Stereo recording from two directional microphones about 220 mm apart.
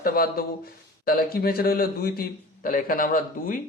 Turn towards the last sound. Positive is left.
turn(degrees=40)  # may be behind; listen again after turning